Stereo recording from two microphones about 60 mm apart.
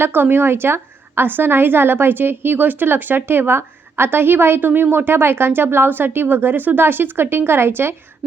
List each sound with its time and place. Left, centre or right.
0.0 s a woman's voice: right